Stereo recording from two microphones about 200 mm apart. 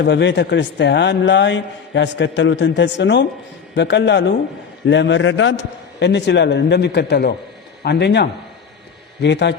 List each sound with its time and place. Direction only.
0.0 s a man's voice: 60° left (ahead or behind)
6.0 s a man's voice: 60° left (ahead or behind)